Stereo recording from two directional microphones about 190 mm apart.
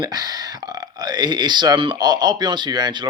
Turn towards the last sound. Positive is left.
turn(degrees=-25)  # may be behind; listen again after turning